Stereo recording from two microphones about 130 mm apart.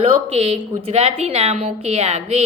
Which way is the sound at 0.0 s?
50° right (ahead or behind).